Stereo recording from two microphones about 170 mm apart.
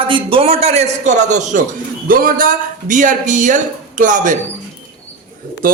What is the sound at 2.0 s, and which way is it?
A man's voice, 55° right (ahead or behind).